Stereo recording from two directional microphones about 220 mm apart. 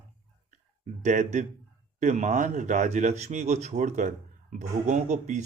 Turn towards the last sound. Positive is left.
turn(degrees=-35)  # may be behind; listen again after turning